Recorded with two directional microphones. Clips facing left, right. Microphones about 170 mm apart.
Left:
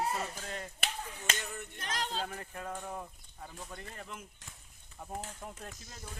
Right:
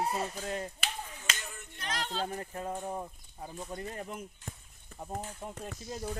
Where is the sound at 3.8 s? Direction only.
40° right (ahead or behind).